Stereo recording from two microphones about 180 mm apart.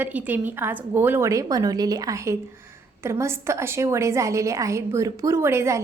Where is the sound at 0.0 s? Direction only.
10° right (ahead or behind).